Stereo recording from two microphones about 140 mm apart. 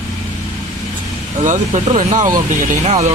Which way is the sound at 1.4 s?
60° right (ahead or behind).